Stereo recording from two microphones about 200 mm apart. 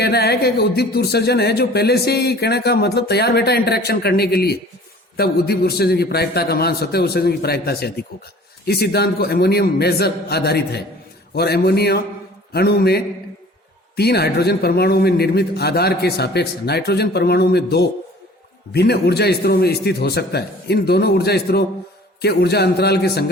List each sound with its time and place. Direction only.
0.0 s a man's voice: 55° left (ahead or behind)